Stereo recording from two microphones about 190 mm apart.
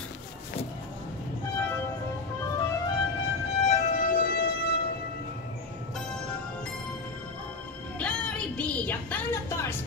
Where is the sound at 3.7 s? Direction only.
45° left (ahead or behind).